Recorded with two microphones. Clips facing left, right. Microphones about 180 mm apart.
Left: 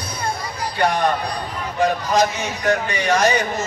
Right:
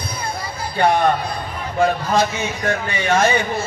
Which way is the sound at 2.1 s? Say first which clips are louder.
Even; 40° left (ahead or behind).